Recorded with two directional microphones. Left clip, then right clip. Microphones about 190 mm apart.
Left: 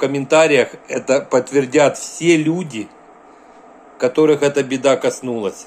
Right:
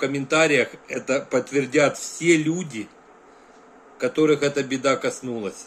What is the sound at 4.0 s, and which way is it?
Speech, 15° right (ahead or behind).